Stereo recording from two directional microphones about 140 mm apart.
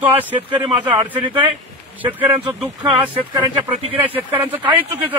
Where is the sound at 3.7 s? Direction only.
45° right (ahead or behind).